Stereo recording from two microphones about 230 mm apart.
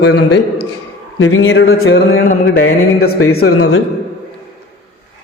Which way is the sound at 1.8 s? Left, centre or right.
Left.